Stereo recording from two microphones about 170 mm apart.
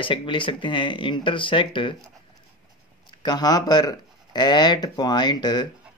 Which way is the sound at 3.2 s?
25° left (ahead or behind).